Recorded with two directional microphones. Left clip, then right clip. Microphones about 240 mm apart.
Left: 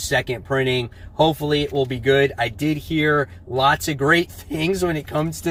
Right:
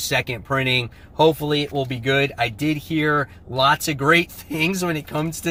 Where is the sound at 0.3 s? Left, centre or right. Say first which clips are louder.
Even; centre.